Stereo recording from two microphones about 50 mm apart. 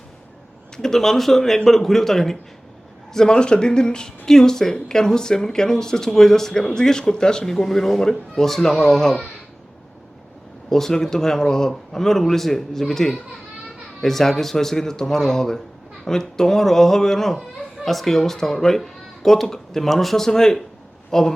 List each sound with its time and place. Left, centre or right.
0.8 s speech: centre
10.7 s speech: centre